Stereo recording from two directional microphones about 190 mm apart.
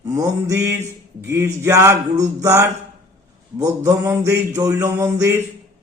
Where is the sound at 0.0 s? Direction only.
15° right (ahead or behind).